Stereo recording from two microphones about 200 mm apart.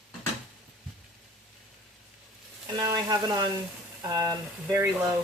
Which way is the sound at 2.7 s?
20° right (ahead or behind).